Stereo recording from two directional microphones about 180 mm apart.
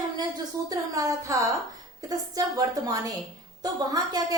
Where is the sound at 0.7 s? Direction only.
20° right (ahead or behind).